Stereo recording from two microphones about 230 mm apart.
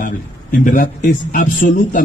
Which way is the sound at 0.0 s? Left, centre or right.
Left.